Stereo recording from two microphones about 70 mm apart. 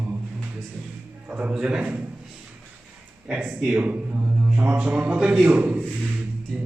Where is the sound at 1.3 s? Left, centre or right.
Right.